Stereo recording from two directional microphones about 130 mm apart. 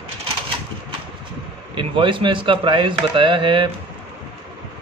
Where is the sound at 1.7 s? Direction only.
40° right (ahead or behind).